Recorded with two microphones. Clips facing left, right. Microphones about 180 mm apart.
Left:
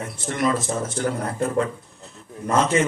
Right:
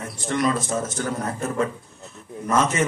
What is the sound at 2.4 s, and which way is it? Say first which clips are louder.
Speech: left 2 dB; 30° left (ahead or behind).